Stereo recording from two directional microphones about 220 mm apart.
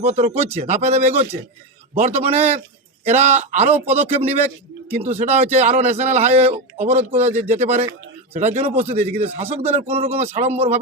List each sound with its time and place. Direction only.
0.0 s a man's voice: 30° right (ahead or behind)